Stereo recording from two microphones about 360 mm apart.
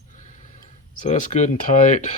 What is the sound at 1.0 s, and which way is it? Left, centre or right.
Speech, left.